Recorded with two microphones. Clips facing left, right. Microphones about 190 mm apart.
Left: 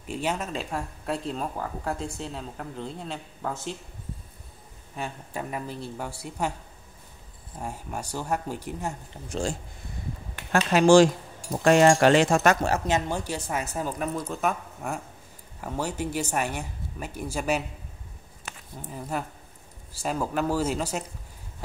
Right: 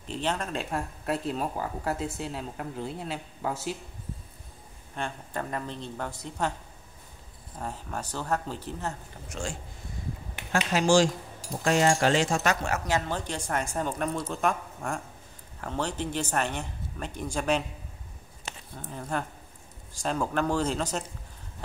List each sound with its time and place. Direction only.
0.0 s speech: 10° left (ahead or behind); by 3.7 s 5° right (ahead or behind)
4.9 s speech: 5° left (ahead or behind)
7.5 s speech: 10° left (ahead or behind)
9.3 s speech: 35° left (ahead or behind)
10.7 s speech: 60° left (ahead or behind)
12.8 s speech: 20° left (ahead or behind)
13.7 s speech: 5° left (ahead or behind)
18.8 s speech: 5° left (ahead or behind)